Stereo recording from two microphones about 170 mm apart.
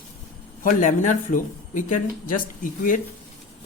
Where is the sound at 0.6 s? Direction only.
50° left (ahead or behind).